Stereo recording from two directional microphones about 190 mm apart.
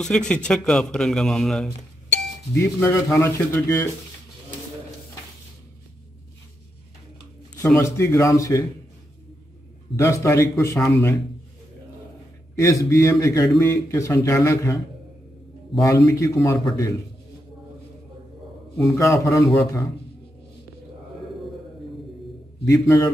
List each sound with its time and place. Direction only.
0.0 s a man's voice: 5° left (ahead or behind)
7.6 s a man's voice: 15° left (ahead or behind)
9.9 s a man's voice: 15° left (ahead or behind)
12.5 s a man's voice: 15° left (ahead or behind)
15.7 s a man's voice: centre (ahead or behind)
16.1 s a man's voice: 15° left (ahead or behind)
18.9 s a man's voice: 15° left (ahead or behind)
22.7 s a man's voice: 15° left (ahead or behind)